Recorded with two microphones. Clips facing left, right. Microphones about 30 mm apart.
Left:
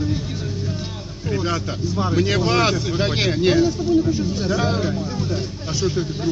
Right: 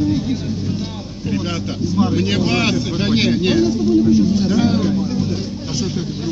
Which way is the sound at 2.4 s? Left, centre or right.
Right.